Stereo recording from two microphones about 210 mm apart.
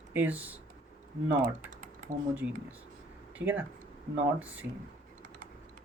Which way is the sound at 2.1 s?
40° right (ahead or behind).